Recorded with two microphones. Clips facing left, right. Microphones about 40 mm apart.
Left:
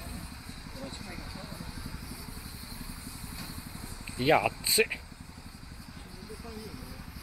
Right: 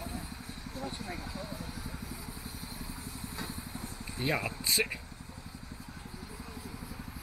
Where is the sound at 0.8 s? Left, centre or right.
Right.